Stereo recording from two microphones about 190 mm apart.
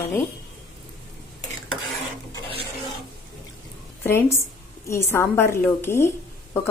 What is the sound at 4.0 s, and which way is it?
Speech, 15° left (ahead or behind).